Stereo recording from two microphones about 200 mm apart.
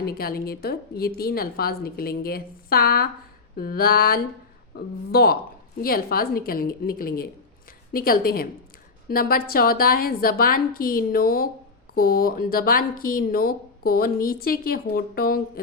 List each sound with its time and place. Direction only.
0.0 s speech: 50° left (ahead or behind)